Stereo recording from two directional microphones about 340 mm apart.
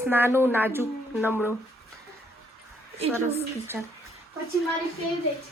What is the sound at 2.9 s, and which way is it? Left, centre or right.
Speech, centre.